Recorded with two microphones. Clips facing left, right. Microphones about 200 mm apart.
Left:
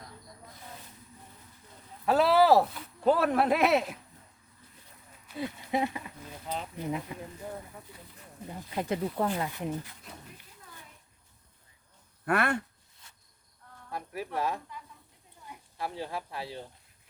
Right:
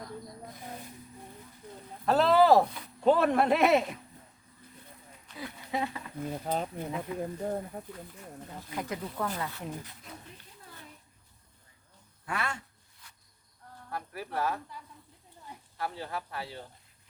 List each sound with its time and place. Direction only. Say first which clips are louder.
2.0 s speech: even; 10° left (ahead or behind)
5.4 s speech: left 4 dB; 20° left (ahead or behind)
6.3 s speech: right 4 dB; 50° right (ahead or behind)
8.7 s speech: left 5 dB; 30° left (ahead or behind)
12.2 s speech: left 8 dB; 60° left (ahead or behind)
13.9 s speech: left 1 dB; 20° left (ahead or behind)
15.8 s speech: left 1 dB; 25° left (ahead or behind)